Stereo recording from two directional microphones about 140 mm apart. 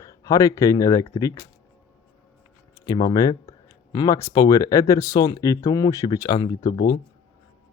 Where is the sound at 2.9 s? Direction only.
30° left (ahead or behind).